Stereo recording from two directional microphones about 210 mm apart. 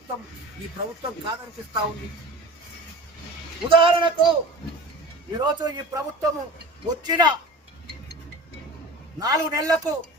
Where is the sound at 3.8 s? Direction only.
25° right (ahead or behind).